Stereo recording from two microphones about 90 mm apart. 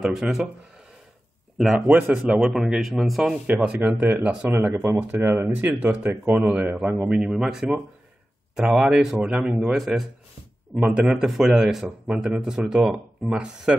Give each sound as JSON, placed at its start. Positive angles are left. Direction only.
{"t": 0.0, "sound": "speech", "side_deg": -5}
{"t": 1.6, "sound": "speech", "side_deg": -5}
{"t": 2.4, "sound": "a man's voice", "side_deg": -5}
{"t": 3.4, "sound": "speech", "side_deg": -15}
{"t": 5.1, "sound": "speech", "side_deg": -25}
{"t": 8.5, "sound": "a man's voice", "side_deg": -10}